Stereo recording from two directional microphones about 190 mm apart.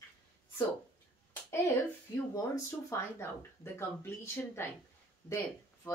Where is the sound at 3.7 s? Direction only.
15° left (ahead or behind).